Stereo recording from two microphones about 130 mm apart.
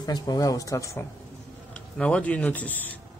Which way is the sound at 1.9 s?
10° left (ahead or behind).